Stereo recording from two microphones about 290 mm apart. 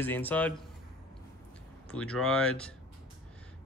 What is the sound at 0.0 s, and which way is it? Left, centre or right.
Speech, centre.